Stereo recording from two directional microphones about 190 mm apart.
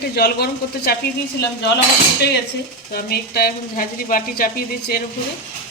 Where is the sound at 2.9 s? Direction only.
55° left (ahead or behind).